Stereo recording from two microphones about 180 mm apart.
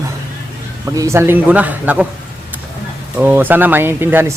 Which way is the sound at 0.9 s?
15° right (ahead or behind).